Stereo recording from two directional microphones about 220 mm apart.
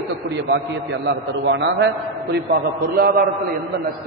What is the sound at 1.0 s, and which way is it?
Speech, 55° right (ahead or behind).